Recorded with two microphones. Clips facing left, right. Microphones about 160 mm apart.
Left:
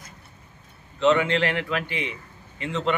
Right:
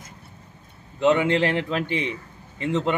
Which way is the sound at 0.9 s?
15° right (ahead or behind).